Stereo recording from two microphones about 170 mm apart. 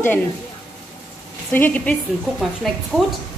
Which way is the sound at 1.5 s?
10° left (ahead or behind).